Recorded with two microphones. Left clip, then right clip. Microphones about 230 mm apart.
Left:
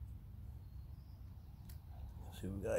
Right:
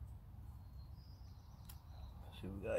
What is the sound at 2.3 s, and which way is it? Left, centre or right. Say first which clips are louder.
Speech: left 2 dB; left.